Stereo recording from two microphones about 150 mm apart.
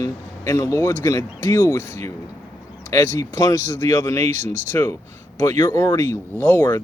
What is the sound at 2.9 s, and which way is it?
Speech, 20° left (ahead or behind).